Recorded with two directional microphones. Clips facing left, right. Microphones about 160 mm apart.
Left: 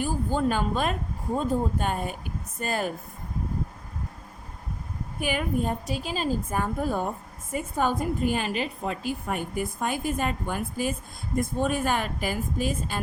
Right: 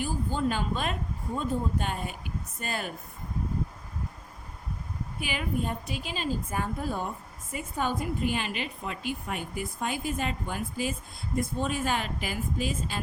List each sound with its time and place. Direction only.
0.0 s speech: 45° left (ahead or behind)
5.2 s speech: 50° left (ahead or behind)